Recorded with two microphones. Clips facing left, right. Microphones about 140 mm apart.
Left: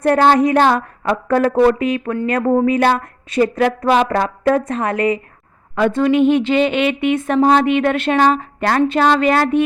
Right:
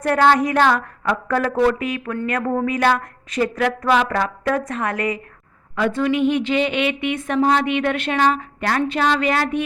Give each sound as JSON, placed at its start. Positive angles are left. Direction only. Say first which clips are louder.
{"t": 0.0, "sound": "a woman's voice", "louder": "left 4 dB", "side_deg": 30}